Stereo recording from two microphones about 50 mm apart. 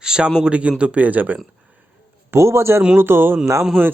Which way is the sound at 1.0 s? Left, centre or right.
Right.